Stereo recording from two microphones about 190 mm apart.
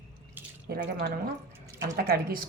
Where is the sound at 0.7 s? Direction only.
55° right (ahead or behind).